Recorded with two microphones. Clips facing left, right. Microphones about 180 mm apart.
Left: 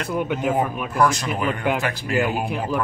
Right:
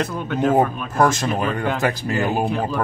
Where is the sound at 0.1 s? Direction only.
15° left (ahead or behind).